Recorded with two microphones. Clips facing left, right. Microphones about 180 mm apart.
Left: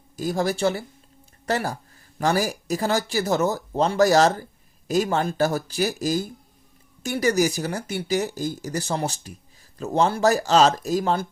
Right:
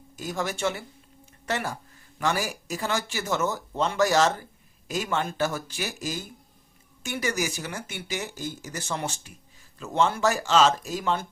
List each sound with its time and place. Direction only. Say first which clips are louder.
0.2 s speech: left 6 dB; 35° left (ahead or behind)